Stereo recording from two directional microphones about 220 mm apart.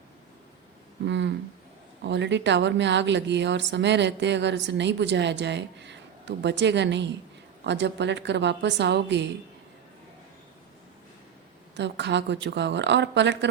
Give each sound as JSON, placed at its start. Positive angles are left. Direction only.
{"t": 1.0, "sound": "speech", "side_deg": -55}
{"t": 11.8, "sound": "speech", "side_deg": -50}